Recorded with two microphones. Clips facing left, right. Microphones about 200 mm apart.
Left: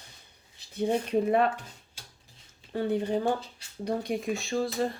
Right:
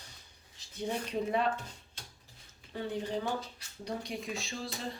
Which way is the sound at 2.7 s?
55° left (ahead or behind).